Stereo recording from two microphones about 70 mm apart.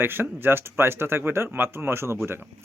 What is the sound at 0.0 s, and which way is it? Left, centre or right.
Speech, right.